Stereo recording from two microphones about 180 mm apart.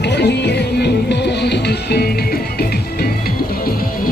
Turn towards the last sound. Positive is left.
turn(degrees=60)  # may be behind; listen again after turning